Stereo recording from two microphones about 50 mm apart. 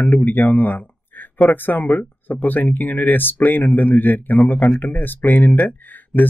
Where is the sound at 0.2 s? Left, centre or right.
Left.